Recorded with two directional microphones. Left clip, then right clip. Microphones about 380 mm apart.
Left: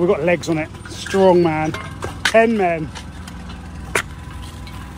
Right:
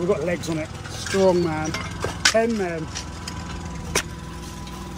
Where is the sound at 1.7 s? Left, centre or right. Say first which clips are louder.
Even; centre.